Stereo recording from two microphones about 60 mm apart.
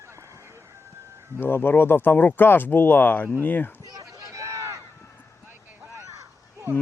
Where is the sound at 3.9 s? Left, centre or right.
Right.